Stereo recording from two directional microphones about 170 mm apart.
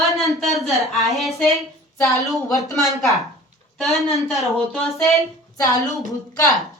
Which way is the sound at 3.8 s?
Centre (ahead or behind).